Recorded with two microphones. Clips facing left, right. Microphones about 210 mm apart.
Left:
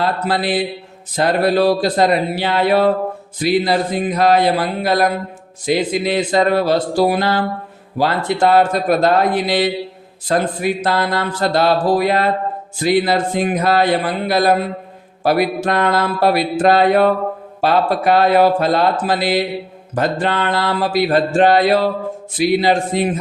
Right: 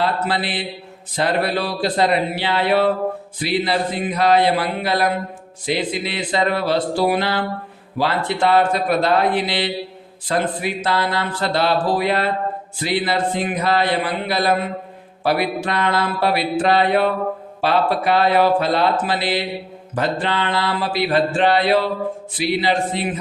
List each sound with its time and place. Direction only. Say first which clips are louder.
0.0 s speech: left 2 dB; 45° left (ahead or behind)